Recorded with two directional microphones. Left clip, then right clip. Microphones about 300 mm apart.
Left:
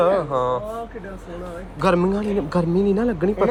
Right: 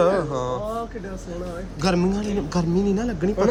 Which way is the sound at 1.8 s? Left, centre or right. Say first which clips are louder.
Left 4 dB; centre.